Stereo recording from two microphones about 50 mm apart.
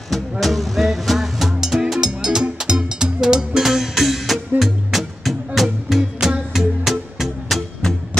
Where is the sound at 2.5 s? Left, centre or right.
Centre.